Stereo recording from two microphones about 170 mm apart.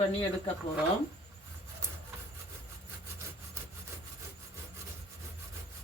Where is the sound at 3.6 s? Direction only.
15° right (ahead or behind).